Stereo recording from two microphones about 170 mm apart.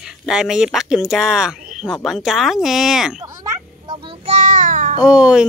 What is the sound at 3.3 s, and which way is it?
Child singing, 25° right (ahead or behind).